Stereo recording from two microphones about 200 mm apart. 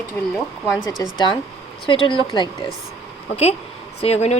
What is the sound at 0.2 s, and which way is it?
Speech, 10° left (ahead or behind).